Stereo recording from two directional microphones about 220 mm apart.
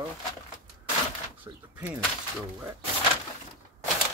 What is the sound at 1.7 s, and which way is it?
Speech, 10° right (ahead or behind).